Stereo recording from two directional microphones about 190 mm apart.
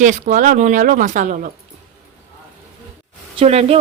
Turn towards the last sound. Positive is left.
turn(degrees=-35)  # may be behind; listen again after turning